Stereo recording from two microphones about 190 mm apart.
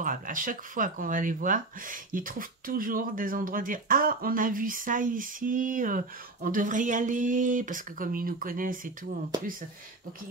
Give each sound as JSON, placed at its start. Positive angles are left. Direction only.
{"t": 0.0, "sound": "speech", "side_deg": -45}